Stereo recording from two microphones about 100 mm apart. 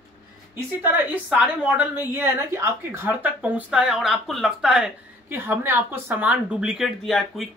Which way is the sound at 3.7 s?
5° right (ahead or behind).